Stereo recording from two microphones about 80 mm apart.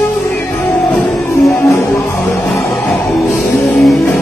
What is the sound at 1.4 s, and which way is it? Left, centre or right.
Music, left.